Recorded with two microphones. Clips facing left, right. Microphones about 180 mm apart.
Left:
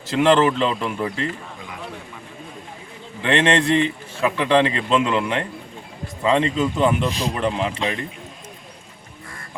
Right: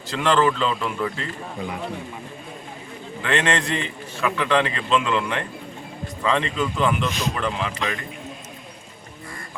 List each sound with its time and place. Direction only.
0.1 s a man's voice: 25° left (ahead or behind)
3.2 s a man's voice: 25° left (ahead or behind)